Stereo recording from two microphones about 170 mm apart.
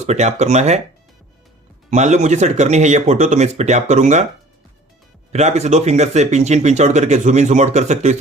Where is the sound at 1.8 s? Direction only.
40° right (ahead or behind).